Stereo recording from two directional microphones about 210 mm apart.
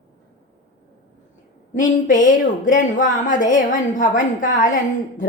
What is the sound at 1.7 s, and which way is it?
Speech, 40° left (ahead or behind).